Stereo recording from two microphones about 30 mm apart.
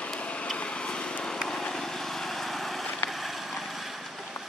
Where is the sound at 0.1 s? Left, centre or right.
Left.